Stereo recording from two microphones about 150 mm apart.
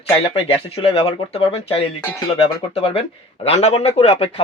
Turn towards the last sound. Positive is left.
turn(degrees=40)  # may be behind; listen again after turning